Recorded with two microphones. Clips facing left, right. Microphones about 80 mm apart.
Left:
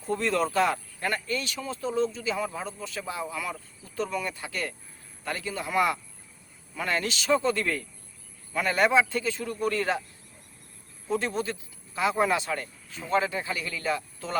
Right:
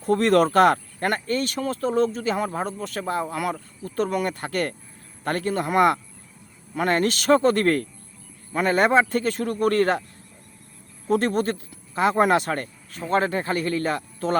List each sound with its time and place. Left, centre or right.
0.0 s speech: right
8.5 s speech: right
11.1 s speech: right